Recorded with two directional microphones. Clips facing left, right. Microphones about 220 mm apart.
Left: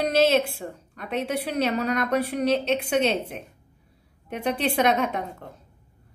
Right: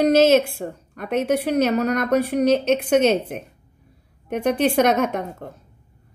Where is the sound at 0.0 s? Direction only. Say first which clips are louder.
Right 6 dB; 45° right (ahead or behind).